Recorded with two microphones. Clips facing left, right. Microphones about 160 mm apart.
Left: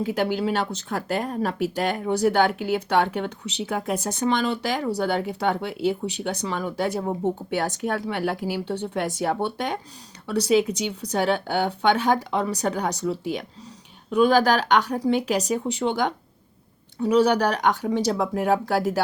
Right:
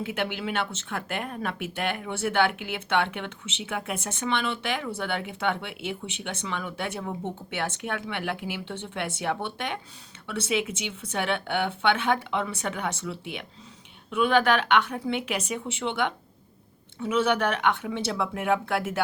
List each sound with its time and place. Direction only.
0.0 s speech: 35° left (ahead or behind)